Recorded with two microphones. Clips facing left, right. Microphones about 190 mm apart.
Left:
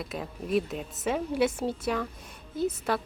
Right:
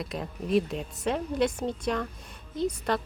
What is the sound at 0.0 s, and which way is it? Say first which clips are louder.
A woman's voice: right 1 dB; centre (ahead or behind).